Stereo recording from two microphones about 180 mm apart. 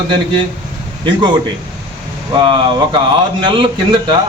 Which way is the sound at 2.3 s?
25° right (ahead or behind).